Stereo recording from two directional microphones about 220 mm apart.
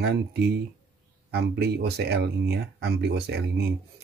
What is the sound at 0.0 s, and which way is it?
Speech, 50° right (ahead or behind).